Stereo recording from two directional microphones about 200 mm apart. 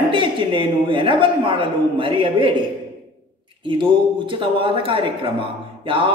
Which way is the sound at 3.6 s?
25° right (ahead or behind).